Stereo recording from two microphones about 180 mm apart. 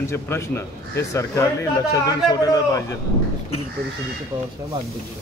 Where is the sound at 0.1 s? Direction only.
15° left (ahead or behind).